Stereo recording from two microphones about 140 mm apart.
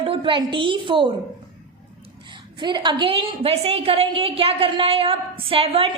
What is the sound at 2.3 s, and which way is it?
A woman's voice, 35° right (ahead or behind).